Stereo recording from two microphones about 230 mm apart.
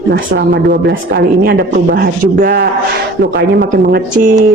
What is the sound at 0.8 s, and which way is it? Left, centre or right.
Speech, right.